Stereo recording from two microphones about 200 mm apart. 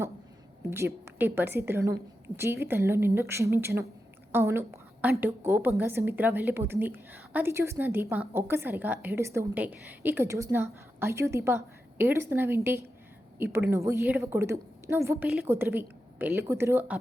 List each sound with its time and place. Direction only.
0.7 s a woman's voice: 10° right (ahead or behind)